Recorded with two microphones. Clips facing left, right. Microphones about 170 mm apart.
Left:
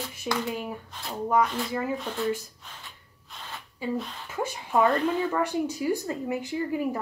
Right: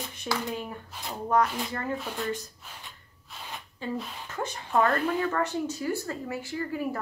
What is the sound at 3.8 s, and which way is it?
Speech, 10° left (ahead or behind).